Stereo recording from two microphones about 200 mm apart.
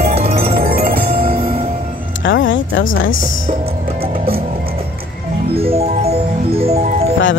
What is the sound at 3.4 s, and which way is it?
Music, 30° right (ahead or behind).